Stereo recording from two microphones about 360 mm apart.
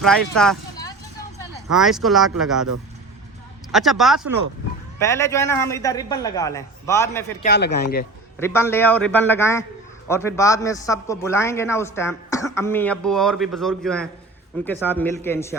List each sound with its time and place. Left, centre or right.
0.0 s a man's voice: centre
3.7 s a man's voice: centre
7.4 s speech: left
8.4 s a man's voice: centre